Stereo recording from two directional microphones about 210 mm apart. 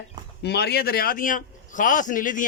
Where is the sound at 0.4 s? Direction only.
50° left (ahead or behind).